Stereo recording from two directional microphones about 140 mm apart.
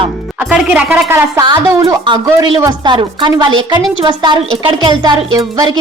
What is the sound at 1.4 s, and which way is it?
Speech, 30° right (ahead or behind).